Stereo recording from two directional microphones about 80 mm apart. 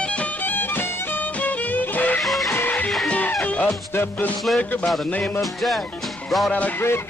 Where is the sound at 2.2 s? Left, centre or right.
Centre.